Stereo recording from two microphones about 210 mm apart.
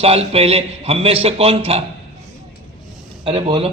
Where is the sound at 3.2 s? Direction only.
25° right (ahead or behind).